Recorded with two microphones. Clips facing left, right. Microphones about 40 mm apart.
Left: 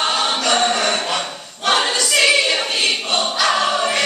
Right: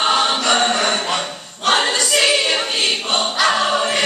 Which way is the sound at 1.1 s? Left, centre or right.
Centre.